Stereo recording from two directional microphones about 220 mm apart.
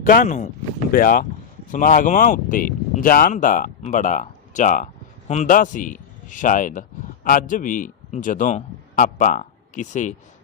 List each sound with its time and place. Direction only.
0.0 s a man's voice: 35° left (ahead or behind)